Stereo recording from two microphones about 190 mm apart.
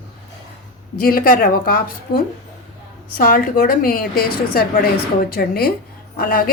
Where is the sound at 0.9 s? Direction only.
50° left (ahead or behind).